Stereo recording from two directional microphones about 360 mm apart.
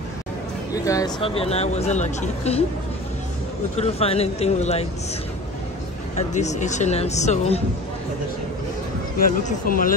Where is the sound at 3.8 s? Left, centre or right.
Centre.